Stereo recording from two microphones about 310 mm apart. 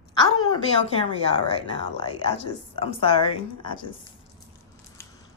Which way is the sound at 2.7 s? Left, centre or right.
Centre.